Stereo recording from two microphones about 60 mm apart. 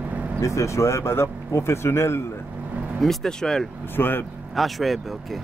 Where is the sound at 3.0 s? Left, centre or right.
Centre.